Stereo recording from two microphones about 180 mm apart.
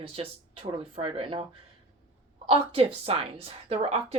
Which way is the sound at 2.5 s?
30° right (ahead or behind).